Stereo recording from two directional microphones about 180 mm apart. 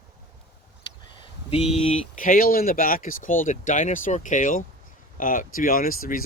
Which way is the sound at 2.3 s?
55° left (ahead or behind).